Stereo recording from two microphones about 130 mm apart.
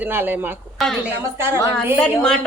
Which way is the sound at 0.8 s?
Centre (ahead or behind).